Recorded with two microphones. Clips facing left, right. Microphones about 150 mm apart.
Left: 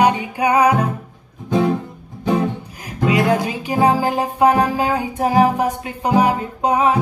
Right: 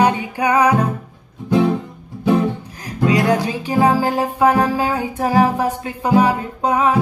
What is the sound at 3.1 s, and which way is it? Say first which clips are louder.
Music: even; 10° left (ahead or behind).